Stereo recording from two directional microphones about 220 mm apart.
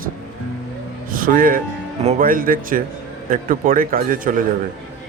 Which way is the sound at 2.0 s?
35° right (ahead or behind).